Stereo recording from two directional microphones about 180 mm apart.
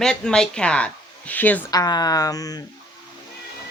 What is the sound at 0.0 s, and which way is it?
A woman's voice, 5° left (ahead or behind).